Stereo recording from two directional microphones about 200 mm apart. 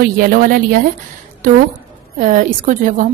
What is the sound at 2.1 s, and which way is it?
Speech, 40° right (ahead or behind).